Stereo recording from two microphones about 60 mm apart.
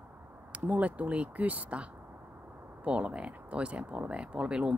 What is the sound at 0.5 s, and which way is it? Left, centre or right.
Speech, right.